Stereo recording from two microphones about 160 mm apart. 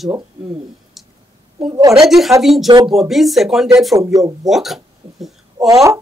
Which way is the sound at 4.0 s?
20° right (ahead or behind).